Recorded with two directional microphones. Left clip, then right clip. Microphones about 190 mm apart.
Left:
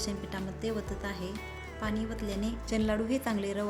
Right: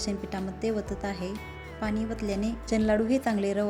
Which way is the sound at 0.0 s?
15° right (ahead or behind).